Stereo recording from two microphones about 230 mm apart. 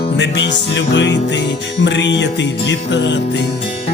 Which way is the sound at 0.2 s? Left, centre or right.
Left.